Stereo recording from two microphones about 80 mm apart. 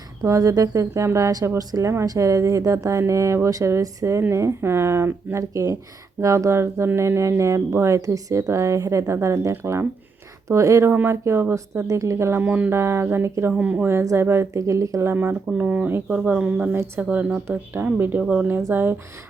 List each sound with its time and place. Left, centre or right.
0.2 s speech: right
12.4 s speech: right
12.7 s speech: right
13.6 s a woman's voice: centre
14.0 s speech: right
15.0 s speech: right
15.9 s speech: right
16.6 s speech: right
17.0 s speech: centre
18.7 s speech: right